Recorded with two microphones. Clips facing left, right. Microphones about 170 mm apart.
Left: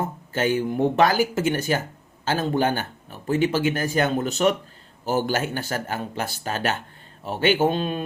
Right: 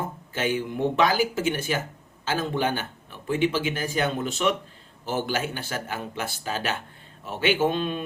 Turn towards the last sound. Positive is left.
turn(degrees=40)  # may be behind; listen again after turning